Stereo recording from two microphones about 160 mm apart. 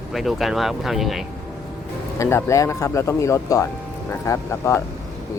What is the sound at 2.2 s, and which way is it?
Speech, 15° left (ahead or behind).